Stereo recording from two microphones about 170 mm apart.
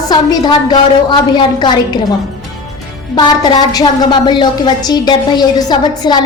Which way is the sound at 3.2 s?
25° left (ahead or behind).